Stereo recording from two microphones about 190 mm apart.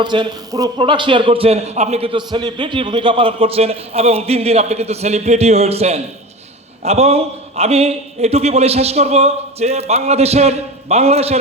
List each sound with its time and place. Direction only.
0.0 s a man's voice: 25° right (ahead or behind)